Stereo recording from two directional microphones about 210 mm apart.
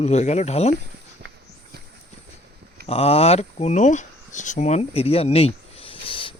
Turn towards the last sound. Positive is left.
turn(degrees=25)  # may be behind; listen again after turning